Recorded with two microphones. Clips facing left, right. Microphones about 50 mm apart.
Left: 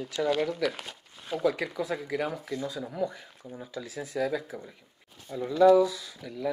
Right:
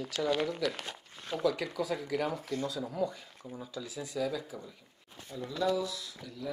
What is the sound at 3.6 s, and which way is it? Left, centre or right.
Speech, left.